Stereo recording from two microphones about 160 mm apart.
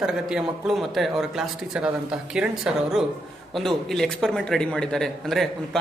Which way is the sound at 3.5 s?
Centre (ahead or behind).